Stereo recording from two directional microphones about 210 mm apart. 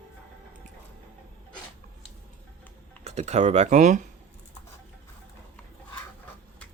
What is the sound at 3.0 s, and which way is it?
Speech, 30° right (ahead or behind).